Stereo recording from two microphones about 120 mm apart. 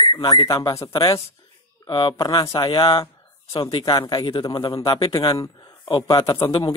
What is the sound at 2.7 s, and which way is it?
Speech, 45° left (ahead or behind).